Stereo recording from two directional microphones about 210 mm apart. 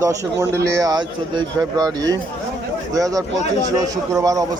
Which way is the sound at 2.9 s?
15° right (ahead or behind).